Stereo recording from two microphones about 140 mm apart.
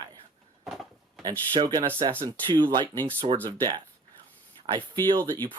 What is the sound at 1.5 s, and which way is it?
Speech, 30° right (ahead or behind).